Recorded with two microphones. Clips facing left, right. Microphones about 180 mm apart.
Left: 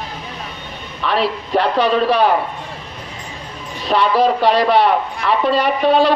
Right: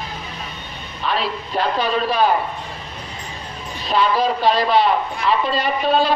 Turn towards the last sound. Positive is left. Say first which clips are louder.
# left 4 dB
turn(degrees=70)  # may be behind; listen again after turning